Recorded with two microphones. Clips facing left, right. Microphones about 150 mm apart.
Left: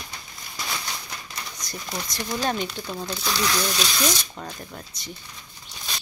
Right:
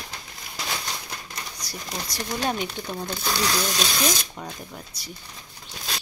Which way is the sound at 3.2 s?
35° right (ahead or behind).